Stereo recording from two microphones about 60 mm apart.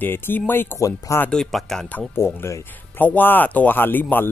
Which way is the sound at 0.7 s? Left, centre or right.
Left.